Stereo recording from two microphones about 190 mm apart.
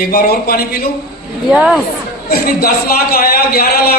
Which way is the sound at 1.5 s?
5° right (ahead or behind).